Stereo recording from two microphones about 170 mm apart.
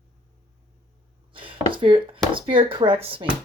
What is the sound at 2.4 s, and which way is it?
Speech, 30° right (ahead or behind).